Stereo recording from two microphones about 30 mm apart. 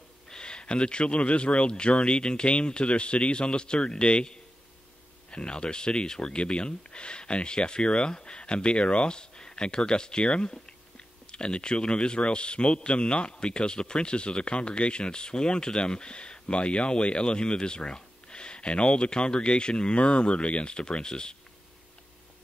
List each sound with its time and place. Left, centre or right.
0.3 s speech: left
6.3 s speech: left
9.1 s speech: left
11.3 s speech: left